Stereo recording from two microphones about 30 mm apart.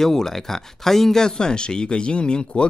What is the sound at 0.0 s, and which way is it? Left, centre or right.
Speech, centre.